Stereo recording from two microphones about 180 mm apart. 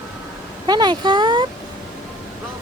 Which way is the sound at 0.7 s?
25° right (ahead or behind).